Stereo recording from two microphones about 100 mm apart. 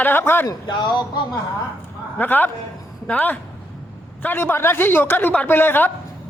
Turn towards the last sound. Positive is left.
turn(degrees=20)  # may be behind; listen again after turning